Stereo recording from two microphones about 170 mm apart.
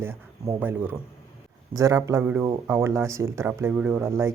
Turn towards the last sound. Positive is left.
turn(degrees=-10)  # may be behind; listen again after turning